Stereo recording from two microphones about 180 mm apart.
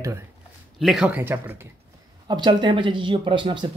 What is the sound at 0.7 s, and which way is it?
Speech, centre (ahead or behind).